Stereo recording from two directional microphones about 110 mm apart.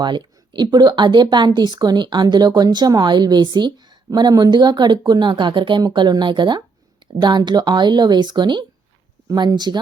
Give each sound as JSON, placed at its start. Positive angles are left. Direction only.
{"t": 0.0, "sound": "speech", "side_deg": -45}